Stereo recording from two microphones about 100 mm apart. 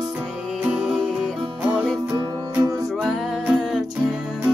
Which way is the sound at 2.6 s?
35° right (ahead or behind).